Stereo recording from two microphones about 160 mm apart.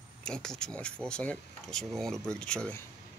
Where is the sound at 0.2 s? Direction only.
5° left (ahead or behind).